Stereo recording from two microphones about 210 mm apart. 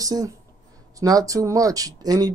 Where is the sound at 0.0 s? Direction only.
15° right (ahead or behind).